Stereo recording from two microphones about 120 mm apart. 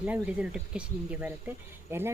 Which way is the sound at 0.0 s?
10° right (ahead or behind).